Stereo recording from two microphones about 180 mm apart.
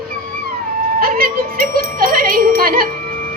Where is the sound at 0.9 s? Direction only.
55° right (ahead or behind).